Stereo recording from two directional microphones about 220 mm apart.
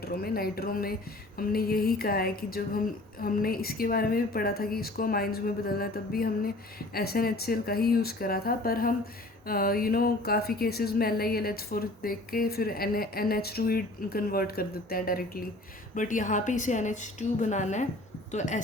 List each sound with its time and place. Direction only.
0.0 s a woman's voice: 45° left (ahead or behind)